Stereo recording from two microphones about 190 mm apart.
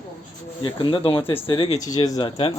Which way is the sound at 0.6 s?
25° left (ahead or behind).